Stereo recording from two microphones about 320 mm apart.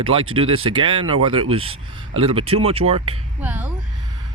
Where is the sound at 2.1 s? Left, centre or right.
Centre.